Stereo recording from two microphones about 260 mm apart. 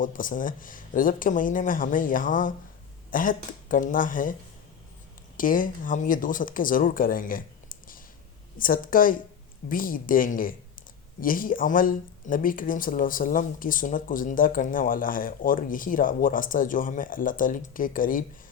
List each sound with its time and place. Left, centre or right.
0.0 s speech: left
5.4 s speech: left